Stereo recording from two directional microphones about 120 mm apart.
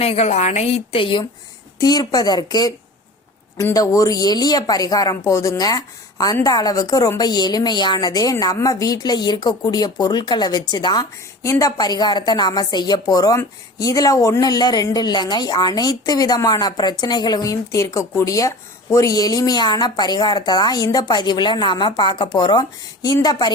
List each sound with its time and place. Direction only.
0.0 s a woman's voice: 60° left (ahead or behind)
1.8 s a woman's voice: 35° left (ahead or behind)
11.4 s a woman's voice: 25° left (ahead or behind)